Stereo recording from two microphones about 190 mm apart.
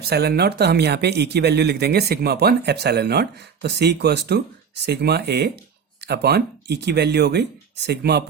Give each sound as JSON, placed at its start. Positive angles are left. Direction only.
{"t": 0.0, "sound": "speech", "side_deg": -55}